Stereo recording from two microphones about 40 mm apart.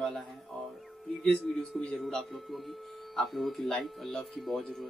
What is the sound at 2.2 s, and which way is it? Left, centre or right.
Speech, centre.